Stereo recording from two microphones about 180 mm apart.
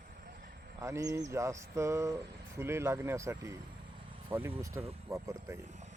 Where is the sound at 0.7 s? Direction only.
15° right (ahead or behind).